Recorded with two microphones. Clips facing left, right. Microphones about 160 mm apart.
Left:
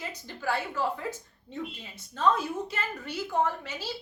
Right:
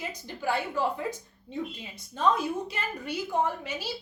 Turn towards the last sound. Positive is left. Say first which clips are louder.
# right 1 dB
turn(degrees=-15)  # may be behind; listen again after turning